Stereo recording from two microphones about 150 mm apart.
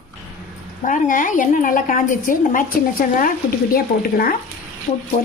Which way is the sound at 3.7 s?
80° left.